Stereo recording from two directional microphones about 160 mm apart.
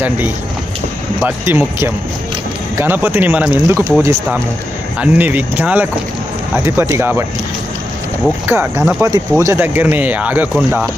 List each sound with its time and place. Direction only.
1.2 s speech: 15° right (ahead or behind)
8.4 s speech: 15° right (ahead or behind)